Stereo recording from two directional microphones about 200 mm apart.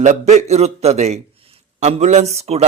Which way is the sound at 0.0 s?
35° right (ahead or behind).